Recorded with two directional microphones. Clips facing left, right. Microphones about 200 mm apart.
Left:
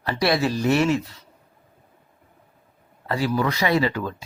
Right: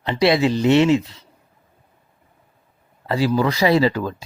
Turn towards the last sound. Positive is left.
turn(degrees=-35)  # may be behind; listen again after turning